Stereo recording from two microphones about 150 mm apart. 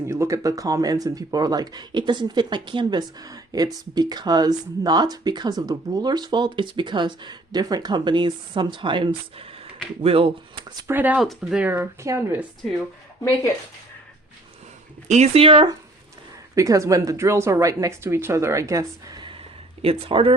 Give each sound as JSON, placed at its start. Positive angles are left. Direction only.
{"t": 0.1, "sound": "speech", "side_deg": -20}
{"t": 10.8, "sound": "speech", "side_deg": -10}
{"t": 11.6, "sound": "speech", "side_deg": -15}
{"t": 15.0, "sound": "speech", "side_deg": -50}
{"t": 16.6, "sound": "speech", "side_deg": -20}